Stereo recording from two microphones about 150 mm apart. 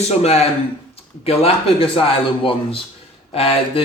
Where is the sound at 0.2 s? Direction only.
45° left (ahead or behind).